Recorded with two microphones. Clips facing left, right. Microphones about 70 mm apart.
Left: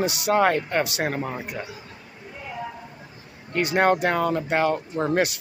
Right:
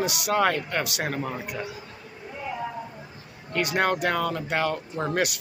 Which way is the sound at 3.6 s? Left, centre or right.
Left.